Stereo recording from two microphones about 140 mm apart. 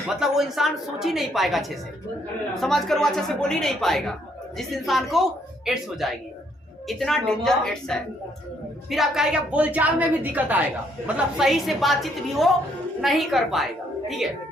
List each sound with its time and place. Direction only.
0.1 s a woman's voice: 5° right (ahead or behind)